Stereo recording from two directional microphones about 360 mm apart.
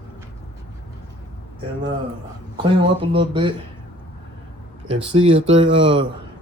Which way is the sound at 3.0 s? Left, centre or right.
Centre.